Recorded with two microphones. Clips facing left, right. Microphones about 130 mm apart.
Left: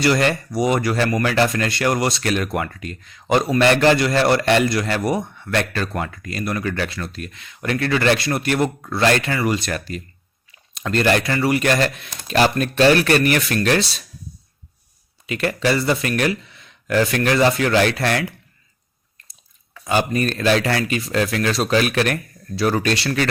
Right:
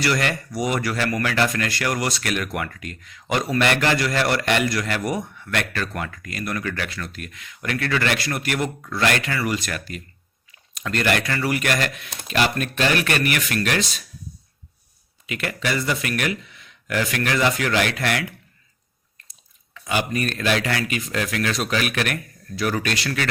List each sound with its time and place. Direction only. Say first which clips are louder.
0.0 s speech: left 5 dB; 30° left (ahead or behind)
15.3 s speech: left 6 dB; 35° left (ahead or behind)
19.7 s speech: left 4 dB; 35° left (ahead or behind)